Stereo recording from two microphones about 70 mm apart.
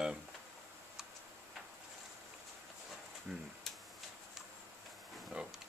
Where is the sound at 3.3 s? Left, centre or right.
Centre.